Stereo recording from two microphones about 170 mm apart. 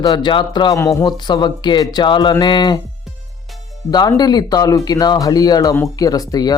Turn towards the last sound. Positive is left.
turn(degrees=20)  # may be behind; listen again after turning